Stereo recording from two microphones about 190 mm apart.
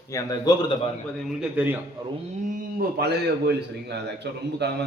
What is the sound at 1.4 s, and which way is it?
Speech, 5° right (ahead or behind).